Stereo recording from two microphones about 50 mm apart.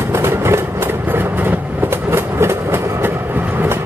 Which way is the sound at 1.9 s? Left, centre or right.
Right.